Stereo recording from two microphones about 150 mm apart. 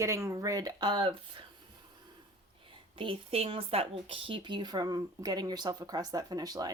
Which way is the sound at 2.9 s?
35° right (ahead or behind).